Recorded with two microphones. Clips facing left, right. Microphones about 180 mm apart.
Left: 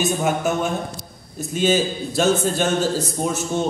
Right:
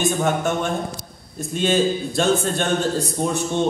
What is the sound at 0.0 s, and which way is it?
A man's voice, centre (ahead or behind).